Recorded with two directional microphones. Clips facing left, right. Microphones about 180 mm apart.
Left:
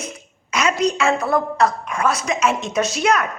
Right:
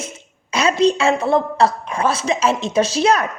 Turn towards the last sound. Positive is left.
turn(degrees=-30)  # may be behind; listen again after turning